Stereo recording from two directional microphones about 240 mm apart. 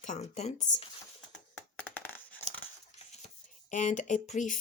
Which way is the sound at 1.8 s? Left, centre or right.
Centre.